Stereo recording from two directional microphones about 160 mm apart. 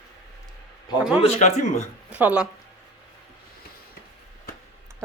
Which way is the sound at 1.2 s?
45° left (ahead or behind).